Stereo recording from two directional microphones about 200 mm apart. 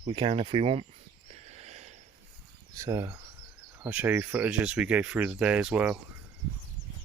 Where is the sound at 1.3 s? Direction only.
35° right (ahead or behind).